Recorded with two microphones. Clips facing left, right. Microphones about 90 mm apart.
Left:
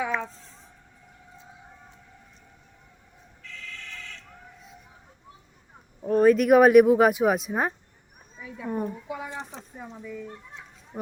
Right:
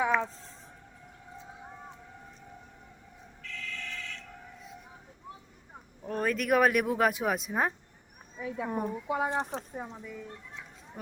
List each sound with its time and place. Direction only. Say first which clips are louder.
6.0 s speech: left 12 dB; 10° left (ahead or behind)
8.6 s speech: left 4 dB; 10° right (ahead or behind)
9.0 s speech: right 5 dB; 40° right (ahead or behind)
9.8 s speech: left 4 dB; 10° right (ahead or behind)
10.9 s speech: left 9 dB; 30° left (ahead or behind)